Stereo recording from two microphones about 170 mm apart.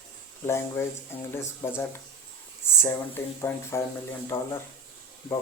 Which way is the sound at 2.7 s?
15° left (ahead or behind).